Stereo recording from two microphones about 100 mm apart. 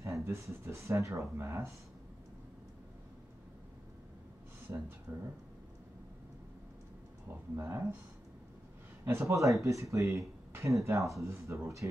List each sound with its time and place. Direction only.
0.0 s speech: 30° right (ahead or behind)
4.6 s speech: 20° right (ahead or behind)
7.5 s speech: 20° right (ahead or behind)
9.0 s speech: 25° right (ahead or behind)